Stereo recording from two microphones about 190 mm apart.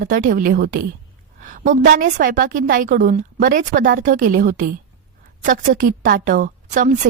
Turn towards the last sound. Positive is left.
turn(degrees=-40)  # may be behind; listen again after turning